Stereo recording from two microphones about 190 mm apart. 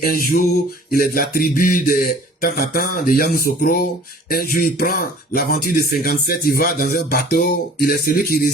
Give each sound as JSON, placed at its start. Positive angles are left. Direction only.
{"t": 0.0, "sound": "speech", "side_deg": 50}